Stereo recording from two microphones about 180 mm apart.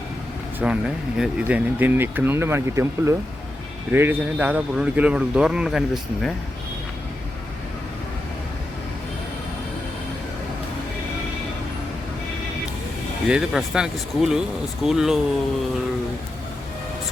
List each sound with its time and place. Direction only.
0.6 s speech: 5° right (ahead or behind)
13.2 s speech: 5° right (ahead or behind)